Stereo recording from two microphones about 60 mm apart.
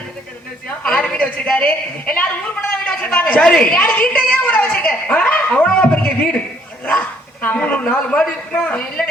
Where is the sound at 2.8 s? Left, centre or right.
Centre.